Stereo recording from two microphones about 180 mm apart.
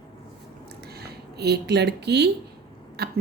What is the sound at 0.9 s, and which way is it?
Speech, 65° right (ahead or behind).